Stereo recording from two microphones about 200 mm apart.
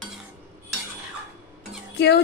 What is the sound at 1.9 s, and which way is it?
Speech, 55° left (ahead or behind).